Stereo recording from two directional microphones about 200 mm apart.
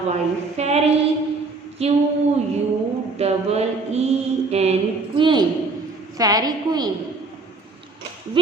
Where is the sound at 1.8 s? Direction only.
30° right (ahead or behind).